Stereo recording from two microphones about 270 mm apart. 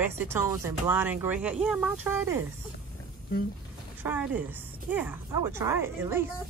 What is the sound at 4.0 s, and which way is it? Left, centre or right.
Speech, centre.